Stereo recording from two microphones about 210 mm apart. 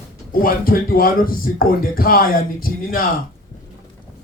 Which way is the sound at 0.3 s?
45° left (ahead or behind).